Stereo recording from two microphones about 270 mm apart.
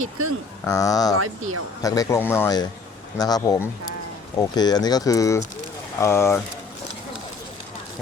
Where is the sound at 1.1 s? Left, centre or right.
Right.